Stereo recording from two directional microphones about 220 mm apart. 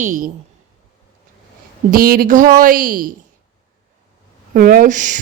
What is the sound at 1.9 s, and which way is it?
A woman's voice, 40° right (ahead or behind).